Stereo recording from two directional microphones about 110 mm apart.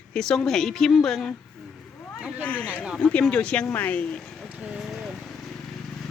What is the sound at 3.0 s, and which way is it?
Speech, 10° left (ahead or behind).